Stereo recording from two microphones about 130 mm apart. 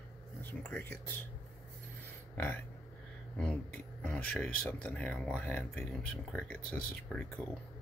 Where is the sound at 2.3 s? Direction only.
15° left (ahead or behind).